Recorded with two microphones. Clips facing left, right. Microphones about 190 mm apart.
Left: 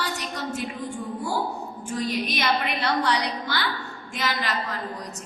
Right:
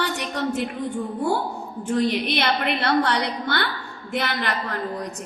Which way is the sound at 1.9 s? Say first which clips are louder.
Right 6 dB; 65° right (ahead or behind).